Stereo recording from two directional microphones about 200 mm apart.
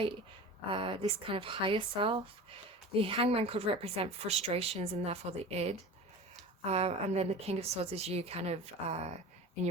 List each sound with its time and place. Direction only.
0.7 s a woman's voice: 25° right (ahead or behind)